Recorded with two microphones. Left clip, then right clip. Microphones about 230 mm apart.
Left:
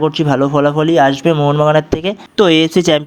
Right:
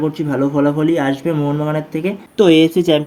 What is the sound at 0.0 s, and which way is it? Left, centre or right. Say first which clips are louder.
Speech: left 5 dB; left.